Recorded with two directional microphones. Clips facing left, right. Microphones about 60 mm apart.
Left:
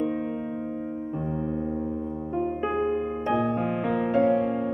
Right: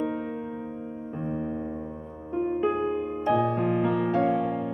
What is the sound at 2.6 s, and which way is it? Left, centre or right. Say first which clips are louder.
Music: even; centre.